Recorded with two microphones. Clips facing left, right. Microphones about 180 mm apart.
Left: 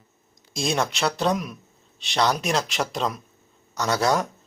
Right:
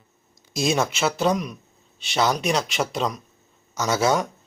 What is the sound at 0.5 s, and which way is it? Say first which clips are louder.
Speech: right 2 dB; centre (ahead or behind).